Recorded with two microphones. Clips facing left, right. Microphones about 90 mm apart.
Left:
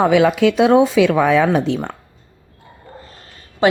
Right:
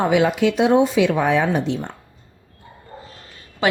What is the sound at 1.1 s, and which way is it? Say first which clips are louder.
Speech: left 4 dB; 90° left.